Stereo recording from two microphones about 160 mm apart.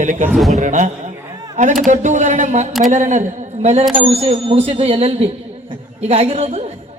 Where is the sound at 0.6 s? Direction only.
50° right (ahead or behind).